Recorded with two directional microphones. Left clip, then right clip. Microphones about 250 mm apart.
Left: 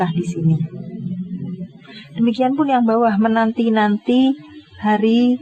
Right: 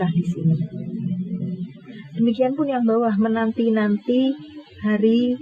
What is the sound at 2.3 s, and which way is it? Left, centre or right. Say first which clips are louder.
Speech: left 4 dB; left.